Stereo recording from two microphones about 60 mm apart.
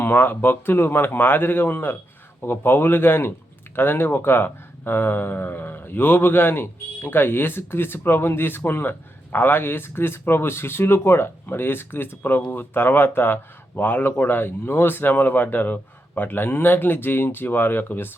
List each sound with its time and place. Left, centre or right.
0.0 s speech: left